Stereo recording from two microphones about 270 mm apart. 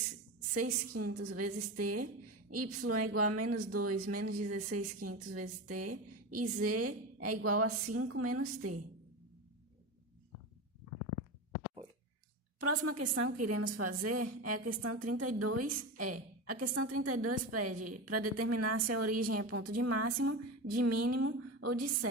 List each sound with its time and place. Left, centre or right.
0.5 s a woman's voice: right
12.5 s a woman's voice: right